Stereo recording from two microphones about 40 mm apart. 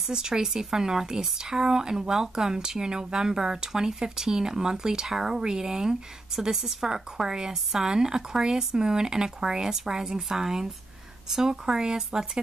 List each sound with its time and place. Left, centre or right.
0.1 s speech: centre